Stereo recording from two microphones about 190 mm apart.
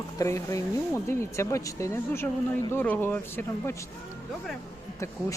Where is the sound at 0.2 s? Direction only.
15° left (ahead or behind).